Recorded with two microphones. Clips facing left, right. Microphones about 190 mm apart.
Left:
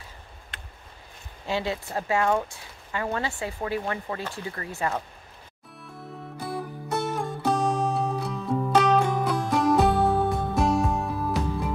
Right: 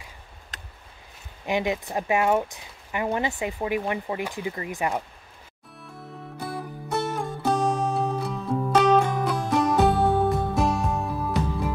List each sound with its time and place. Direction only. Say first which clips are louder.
0.5 s a sound: right 1 dB; 40° right (ahead or behind)
1.4 s speech: right 3 dB; 15° right (ahead or behind)
5.8 s music: left 1 dB; centre (ahead or behind)